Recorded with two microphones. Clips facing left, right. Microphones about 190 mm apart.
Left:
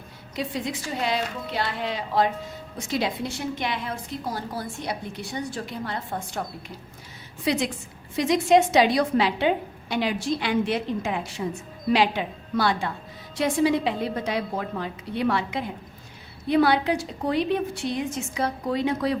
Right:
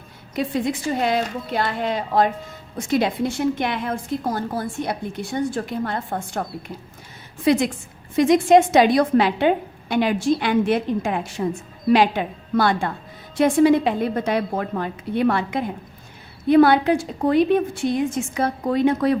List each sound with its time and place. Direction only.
0.3 s a woman's voice: 50° right (ahead or behind)
7.4 s a woman's voice: 50° right (ahead or behind)